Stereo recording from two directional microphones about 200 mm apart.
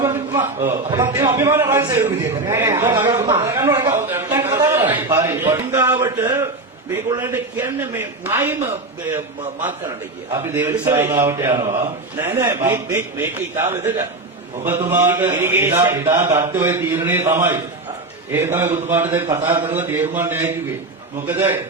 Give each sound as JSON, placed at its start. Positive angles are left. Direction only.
{"t": 0.0, "sound": "a sound", "side_deg": -15}
{"t": 1.0, "sound": "a man's voice", "side_deg": -10}
{"t": 3.1, "sound": "a man's voice", "side_deg": -25}
{"t": 4.1, "sound": "a sound", "side_deg": -10}
{"t": 6.9, "sound": "a man's voice", "side_deg": -15}
{"t": 10.3, "sound": "a man's voice", "side_deg": -15}